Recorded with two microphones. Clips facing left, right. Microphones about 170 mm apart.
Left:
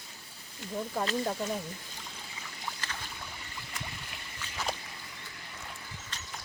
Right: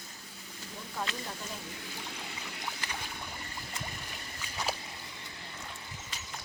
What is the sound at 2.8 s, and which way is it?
Boat, 15° right (ahead or behind).